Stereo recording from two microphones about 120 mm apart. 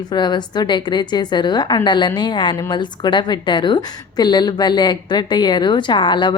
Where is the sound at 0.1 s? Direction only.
35° left (ahead or behind).